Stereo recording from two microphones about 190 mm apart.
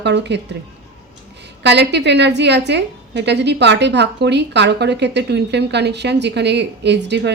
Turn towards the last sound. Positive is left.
turn(degrees=-65)  # may be behind; listen again after turning